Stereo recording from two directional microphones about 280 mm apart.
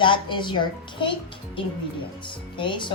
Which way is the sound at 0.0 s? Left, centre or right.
Centre.